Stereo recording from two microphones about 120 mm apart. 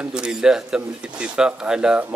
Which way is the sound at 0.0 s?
5° right (ahead or behind).